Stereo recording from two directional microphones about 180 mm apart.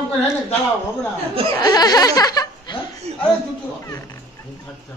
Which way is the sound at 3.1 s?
40° right (ahead or behind).